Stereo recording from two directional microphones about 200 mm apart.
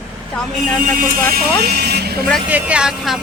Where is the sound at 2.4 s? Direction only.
10° right (ahead or behind).